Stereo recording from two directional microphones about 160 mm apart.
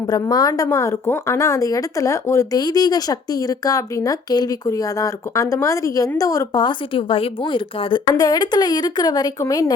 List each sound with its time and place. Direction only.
0.1 s a woman's voice: 25° left (ahead or behind)